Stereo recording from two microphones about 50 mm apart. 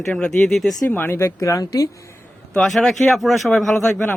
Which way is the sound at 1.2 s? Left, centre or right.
Left.